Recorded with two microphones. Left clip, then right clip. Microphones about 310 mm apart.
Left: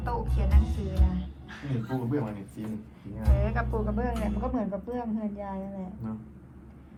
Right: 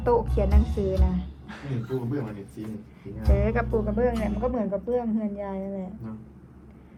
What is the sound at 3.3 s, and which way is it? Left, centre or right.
A woman's voice, centre.